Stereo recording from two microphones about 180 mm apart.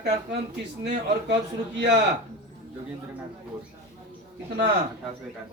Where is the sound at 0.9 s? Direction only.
75° right (ahead or behind).